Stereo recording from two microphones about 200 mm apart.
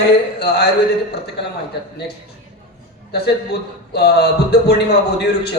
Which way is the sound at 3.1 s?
55° left (ahead or behind).